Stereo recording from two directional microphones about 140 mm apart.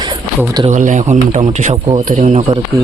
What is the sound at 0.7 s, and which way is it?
Speech, 60° right (ahead or behind).